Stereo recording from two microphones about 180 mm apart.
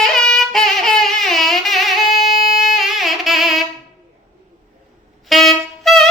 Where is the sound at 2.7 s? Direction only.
Centre (ahead or behind).